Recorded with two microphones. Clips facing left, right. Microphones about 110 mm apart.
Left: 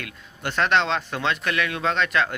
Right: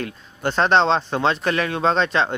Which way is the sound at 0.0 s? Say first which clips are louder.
Right 7 dB; 30° right (ahead or behind).